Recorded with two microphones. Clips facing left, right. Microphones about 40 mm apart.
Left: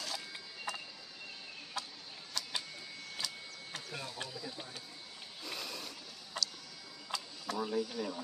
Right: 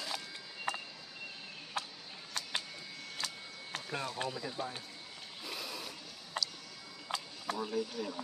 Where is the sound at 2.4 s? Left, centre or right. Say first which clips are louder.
Right 1 dB; right.